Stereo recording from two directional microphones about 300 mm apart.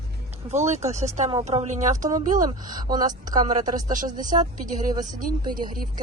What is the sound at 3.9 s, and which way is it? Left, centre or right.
A woman's voice, right.